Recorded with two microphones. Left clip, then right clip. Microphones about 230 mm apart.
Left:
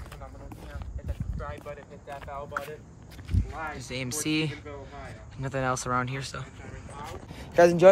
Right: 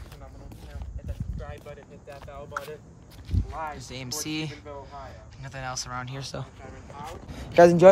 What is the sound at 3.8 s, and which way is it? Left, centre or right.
Speech, centre.